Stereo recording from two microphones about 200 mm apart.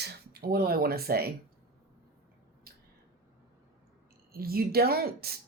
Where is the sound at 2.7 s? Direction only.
50° right (ahead or behind).